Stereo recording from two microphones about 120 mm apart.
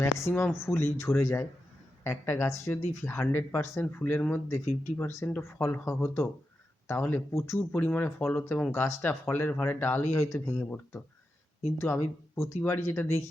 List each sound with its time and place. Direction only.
0.0 s speech: 20° left (ahead or behind)
11.8 s speech: 20° left (ahead or behind)